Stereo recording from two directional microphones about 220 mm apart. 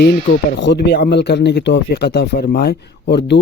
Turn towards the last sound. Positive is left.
turn(degrees=50)  # may be behind; listen again after turning